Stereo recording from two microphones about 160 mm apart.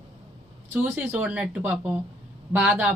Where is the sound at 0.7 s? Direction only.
10° right (ahead or behind).